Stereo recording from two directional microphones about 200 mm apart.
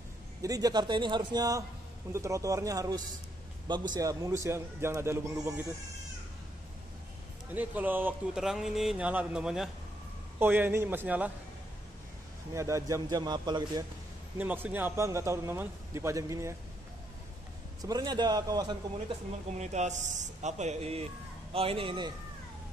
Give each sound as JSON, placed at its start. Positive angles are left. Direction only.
{"t": 0.4, "sound": "a man's voice", "side_deg": -20}
{"t": 7.5, "sound": "a man's voice", "side_deg": -10}
{"t": 12.5, "sound": "a man's voice", "side_deg": -15}
{"t": 14.4, "sound": "a man's voice", "side_deg": -10}
{"t": 17.8, "sound": "a man's voice", "side_deg": -20}
{"t": 19.6, "sound": "a man's voice", "side_deg": -35}